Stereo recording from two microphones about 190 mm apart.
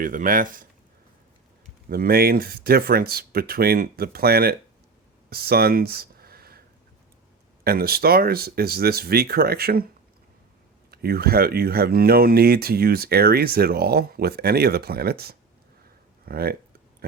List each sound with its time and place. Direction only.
0.0 s speech: 45° right (ahead or behind)
1.9 s speech: 50° right (ahead or behind)
7.6 s speech: 55° right (ahead or behind)
10.9 s speech: 55° right (ahead or behind)
17.0 s a sound: 55° right (ahead or behind)